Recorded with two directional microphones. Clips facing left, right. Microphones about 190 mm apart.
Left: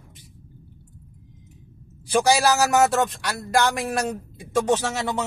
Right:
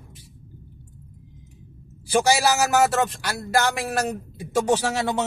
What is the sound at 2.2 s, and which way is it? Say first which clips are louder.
Speech: left 2 dB; centre (ahead or behind).